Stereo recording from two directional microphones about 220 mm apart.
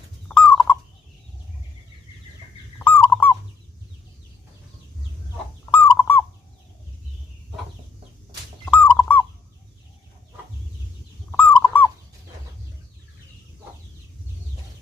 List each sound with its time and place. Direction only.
0.3 s fowl: 5° left (ahead or behind)
2.7 s fowl: 10° left (ahead or behind)
5.7 s fowl: 10° left (ahead or behind)
8.6 s fowl: 5° left (ahead or behind)
11.3 s fowl: 5° left (ahead or behind)